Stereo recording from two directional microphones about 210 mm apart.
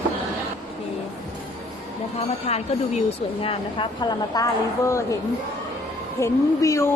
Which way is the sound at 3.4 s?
25° left (ahead or behind).